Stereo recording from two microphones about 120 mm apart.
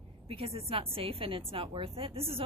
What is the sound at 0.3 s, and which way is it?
A woman's voice, 55° right (ahead or behind).